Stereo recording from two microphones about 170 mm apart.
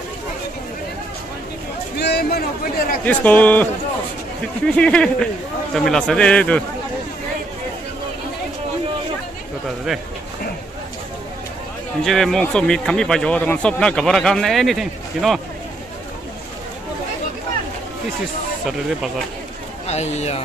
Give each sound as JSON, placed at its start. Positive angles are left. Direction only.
{"t": 2.0, "sound": "a sound", "side_deg": 75}
{"t": 3.1, "sound": "speech", "side_deg": 10}
{"t": 4.6, "sound": "speech", "side_deg": 5}
{"t": 9.9, "sound": "speech", "side_deg": 0}
{"t": 12.0, "sound": "speech", "side_deg": 0}
{"t": 19.9, "sound": "speech", "side_deg": 40}